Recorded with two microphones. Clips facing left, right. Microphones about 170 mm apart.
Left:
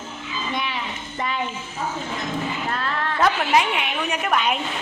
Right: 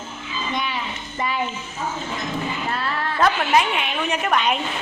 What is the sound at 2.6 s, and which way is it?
Music, 5° right (ahead or behind).